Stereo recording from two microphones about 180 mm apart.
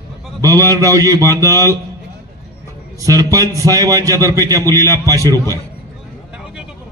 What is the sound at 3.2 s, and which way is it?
A man's voice, 20° right (ahead or behind).